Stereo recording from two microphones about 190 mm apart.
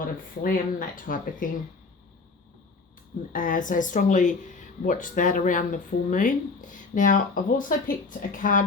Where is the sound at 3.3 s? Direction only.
45° left (ahead or behind).